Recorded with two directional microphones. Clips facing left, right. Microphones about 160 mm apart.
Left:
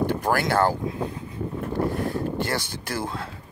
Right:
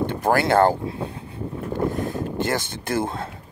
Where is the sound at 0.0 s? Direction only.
25° right (ahead or behind).